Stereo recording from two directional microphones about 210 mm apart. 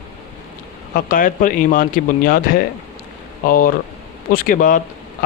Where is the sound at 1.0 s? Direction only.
40° left (ahead or behind).